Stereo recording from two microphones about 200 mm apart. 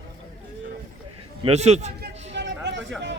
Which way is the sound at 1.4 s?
30° right (ahead or behind).